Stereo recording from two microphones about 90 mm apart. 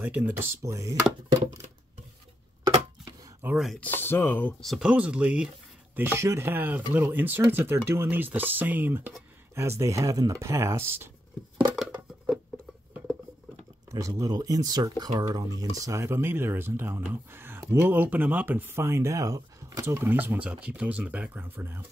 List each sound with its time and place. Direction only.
0.0 s speech: 20° right (ahead or behind)
3.5 s speech: centre (ahead or behind)
3.8 s speech: 25° left (ahead or behind)
4.6 s speech: centre (ahead or behind)
4.8 s speech: 15° right (ahead or behind)
5.9 s speech: 25° right (ahead or behind)
9.6 s speech: 35° right (ahead or behind)
11.7 s a sound: 5° right (ahead or behind)
13.9 s speech: 40° right (ahead or behind)